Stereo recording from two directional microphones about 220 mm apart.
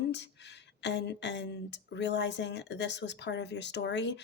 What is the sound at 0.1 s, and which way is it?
Speech, 50° left (ahead or behind).